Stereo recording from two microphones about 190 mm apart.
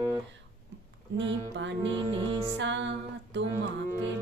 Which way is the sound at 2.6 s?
70° right (ahead or behind).